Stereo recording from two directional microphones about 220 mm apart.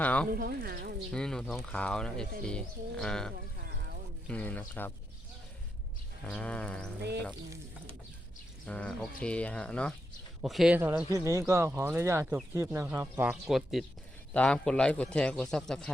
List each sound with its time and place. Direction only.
0.0 s speech: 5° left (ahead or behind)
0.3 s speech: 40° right (ahead or behind)
1.1 s a man's voice: 5° left (ahead or behind)
6.2 s a man's voice: 5° left (ahead or behind)
8.6 s a man's voice: 5° left (ahead or behind)